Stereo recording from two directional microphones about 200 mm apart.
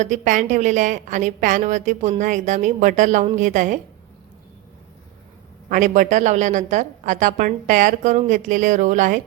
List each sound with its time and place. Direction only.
0.0 s a woman's voice: 40° right (ahead or behind)
5.6 s a woman's voice: 40° right (ahead or behind)